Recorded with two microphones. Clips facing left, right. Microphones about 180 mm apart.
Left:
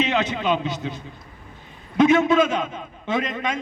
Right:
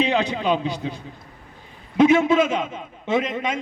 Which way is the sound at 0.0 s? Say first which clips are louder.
Right 1 dB; 35° right (ahead or behind).